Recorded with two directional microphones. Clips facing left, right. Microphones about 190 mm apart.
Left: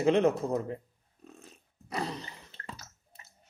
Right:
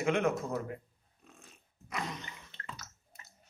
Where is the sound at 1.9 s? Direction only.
35° left (ahead or behind).